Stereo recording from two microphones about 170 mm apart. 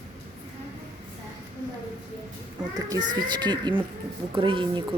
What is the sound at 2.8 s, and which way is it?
A woman's voice, 20° right (ahead or behind).